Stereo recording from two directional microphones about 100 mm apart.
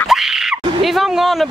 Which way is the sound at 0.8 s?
Centre (ahead or behind).